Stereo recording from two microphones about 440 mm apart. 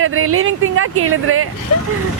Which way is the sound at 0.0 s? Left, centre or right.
Right.